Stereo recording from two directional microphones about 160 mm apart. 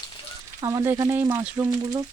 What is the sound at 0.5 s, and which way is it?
Speech, 20° right (ahead or behind).